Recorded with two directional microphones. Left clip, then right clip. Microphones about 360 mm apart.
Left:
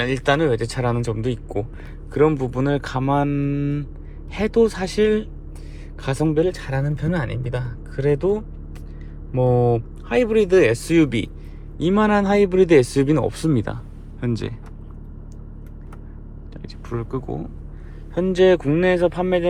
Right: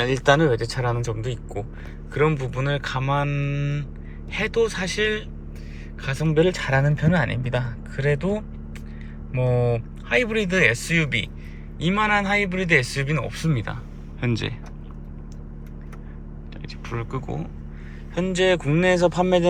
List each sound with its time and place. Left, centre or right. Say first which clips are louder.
0.0 s a man's voice: right 1 dB; centre
16.6 s speech: left 2 dB; centre